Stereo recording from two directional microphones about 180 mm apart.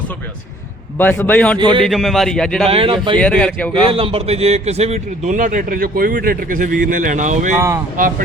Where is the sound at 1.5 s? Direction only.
25° right (ahead or behind).